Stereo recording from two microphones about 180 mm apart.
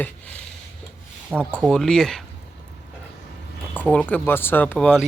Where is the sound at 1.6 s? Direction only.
5° left (ahead or behind).